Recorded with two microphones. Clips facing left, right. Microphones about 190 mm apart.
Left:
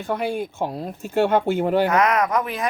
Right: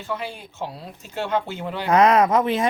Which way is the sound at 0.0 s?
55° left (ahead or behind).